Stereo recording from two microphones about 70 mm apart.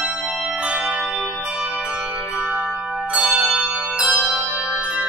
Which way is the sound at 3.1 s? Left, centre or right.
Centre.